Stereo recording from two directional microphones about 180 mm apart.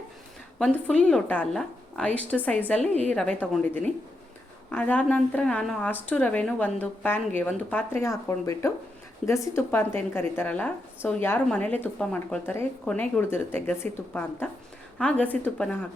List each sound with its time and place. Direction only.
0.6 s a woman's voice: 5° left (ahead or behind)
4.7 s a woman's voice: 10° left (ahead or behind)